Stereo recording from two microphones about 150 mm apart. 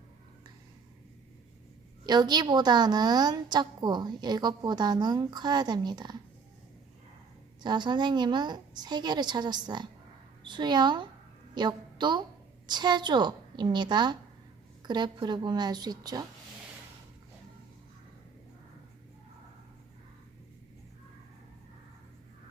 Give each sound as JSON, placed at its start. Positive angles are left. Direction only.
{"t": 2.0, "sound": "a woman's voice", "side_deg": -30}
{"t": 7.6, "sound": "a woman's voice", "side_deg": -30}